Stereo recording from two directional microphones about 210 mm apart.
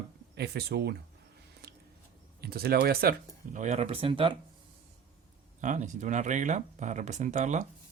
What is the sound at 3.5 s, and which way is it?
Speech, 30° right (ahead or behind).